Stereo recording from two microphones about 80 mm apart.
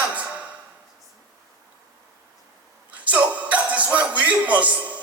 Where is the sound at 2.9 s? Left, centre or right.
Centre.